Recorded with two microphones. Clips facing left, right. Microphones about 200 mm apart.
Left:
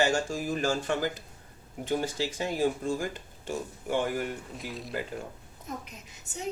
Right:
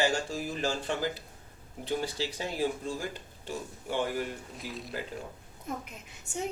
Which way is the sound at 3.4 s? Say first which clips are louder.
Left 4 dB; 50° left (ahead or behind).